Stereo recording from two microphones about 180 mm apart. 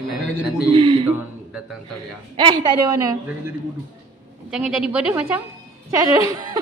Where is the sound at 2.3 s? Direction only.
25° right (ahead or behind).